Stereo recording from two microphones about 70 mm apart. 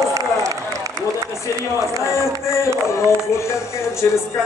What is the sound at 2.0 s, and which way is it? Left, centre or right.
A man's voice, left.